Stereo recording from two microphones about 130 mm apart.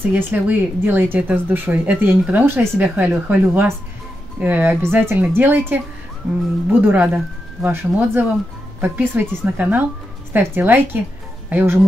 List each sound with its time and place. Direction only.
0.1 s speech: 15° right (ahead or behind)